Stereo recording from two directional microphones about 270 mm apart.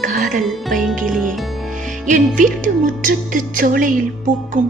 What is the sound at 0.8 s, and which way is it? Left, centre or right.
Music, centre.